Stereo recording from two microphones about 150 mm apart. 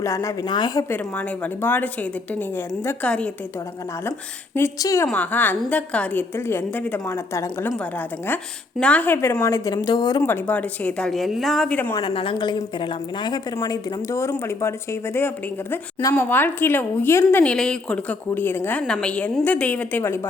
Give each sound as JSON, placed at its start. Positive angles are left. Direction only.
{"t": 0.0, "sound": "a woman's voice", "side_deg": 20}
{"t": 4.5, "sound": "a woman's voice", "side_deg": 20}
{"t": 8.8, "sound": "a woman's voice", "side_deg": 10}
{"t": 10.2, "sound": "a woman's voice", "side_deg": 10}
{"t": 11.9, "sound": "a woman's voice", "side_deg": 35}